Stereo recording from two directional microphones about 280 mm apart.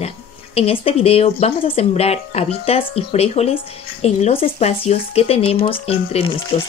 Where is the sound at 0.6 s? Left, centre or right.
Left.